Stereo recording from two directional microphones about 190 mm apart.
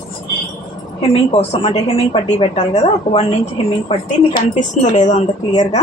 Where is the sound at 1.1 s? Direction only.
30° left (ahead or behind).